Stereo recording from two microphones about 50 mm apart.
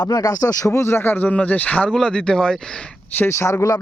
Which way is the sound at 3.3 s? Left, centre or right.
Left.